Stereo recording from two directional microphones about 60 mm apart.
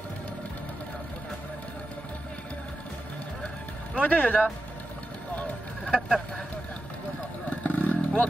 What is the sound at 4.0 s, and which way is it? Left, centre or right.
Speech, left.